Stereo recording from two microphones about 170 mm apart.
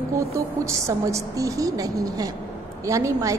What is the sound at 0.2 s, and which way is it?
A woman's voice, 15° right (ahead or behind).